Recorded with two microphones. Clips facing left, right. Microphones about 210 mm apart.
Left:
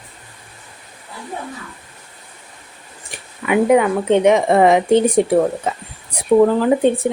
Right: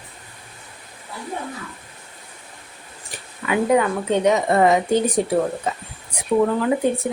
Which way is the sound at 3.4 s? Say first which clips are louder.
Left 5 dB; 20° left (ahead or behind).